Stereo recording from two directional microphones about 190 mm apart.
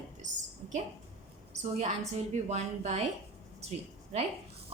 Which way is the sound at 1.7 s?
35° right (ahead or behind).